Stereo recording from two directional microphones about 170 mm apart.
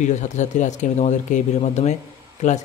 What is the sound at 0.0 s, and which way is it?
A man's voice, 45° left (ahead or behind).